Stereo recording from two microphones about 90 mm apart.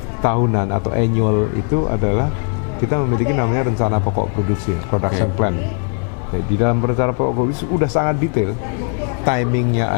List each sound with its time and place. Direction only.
0.2 s speech: 20° left (ahead or behind)
6.6 s speech: 20° left (ahead or behind)